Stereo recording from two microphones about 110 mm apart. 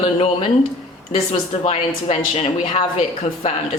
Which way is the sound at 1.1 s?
65° left (ahead or behind).